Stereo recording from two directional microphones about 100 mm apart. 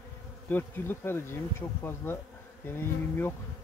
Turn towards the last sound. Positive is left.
turn(degrees=20)  # may be behind; listen again after turning